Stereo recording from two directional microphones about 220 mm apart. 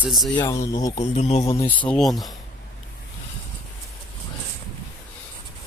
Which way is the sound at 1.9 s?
Centre (ahead or behind).